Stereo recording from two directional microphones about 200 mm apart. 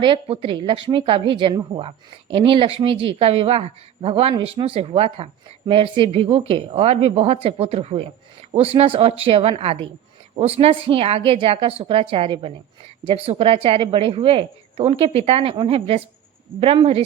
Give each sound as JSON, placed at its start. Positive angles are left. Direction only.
{"t": 0.0, "sound": "speech", "side_deg": -25}